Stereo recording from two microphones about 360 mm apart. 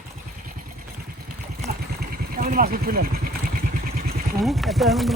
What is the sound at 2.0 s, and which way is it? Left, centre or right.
Vehicle, right.